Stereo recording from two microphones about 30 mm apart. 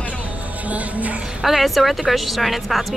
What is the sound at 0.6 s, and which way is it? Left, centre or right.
Music, right.